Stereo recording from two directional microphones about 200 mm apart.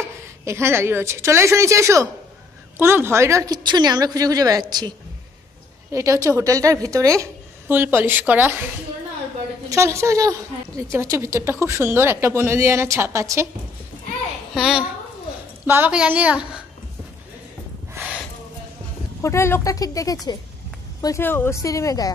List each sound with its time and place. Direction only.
0.5 s a woman's voice: 15° right (ahead or behind)
9.7 s a woman's voice: 15° right (ahead or behind)
14.5 s a child's voice: centre (ahead or behind)
17.9 s a sound: 5° right (ahead or behind)
19.2 s speech: 15° left (ahead or behind)